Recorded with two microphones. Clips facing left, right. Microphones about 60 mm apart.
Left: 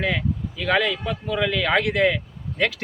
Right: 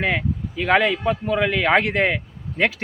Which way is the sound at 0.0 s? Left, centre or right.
Right.